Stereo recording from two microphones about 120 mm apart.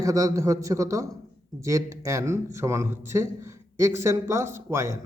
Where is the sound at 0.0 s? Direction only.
30° right (ahead or behind).